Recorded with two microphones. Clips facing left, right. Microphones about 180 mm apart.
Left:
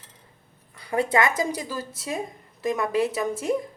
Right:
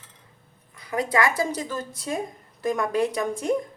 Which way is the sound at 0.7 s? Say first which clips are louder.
Left 1 dB; 30° left (ahead or behind).